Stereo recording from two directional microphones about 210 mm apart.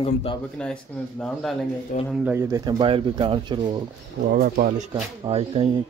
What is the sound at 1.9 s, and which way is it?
Speech, 40° left (ahead or behind).